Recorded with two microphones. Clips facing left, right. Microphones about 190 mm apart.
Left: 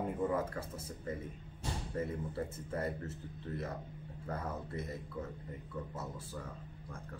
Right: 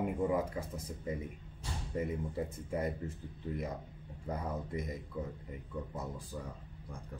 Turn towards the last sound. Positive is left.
turn(degrees=-15)  # may be behind; listen again after turning